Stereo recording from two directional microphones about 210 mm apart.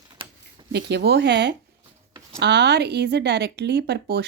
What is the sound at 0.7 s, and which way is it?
Speech, 55° right (ahead or behind).